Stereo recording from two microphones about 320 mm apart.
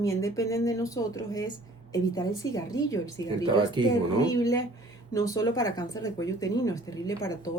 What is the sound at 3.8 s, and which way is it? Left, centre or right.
Speech, centre.